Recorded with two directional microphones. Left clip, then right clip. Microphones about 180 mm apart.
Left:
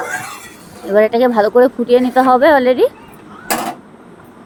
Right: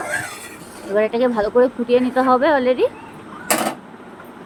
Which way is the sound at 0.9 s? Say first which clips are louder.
Left 6 dB; 50° left (ahead or behind).